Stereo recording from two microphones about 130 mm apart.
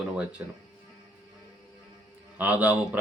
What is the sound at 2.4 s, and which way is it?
Speech, 10° right (ahead or behind).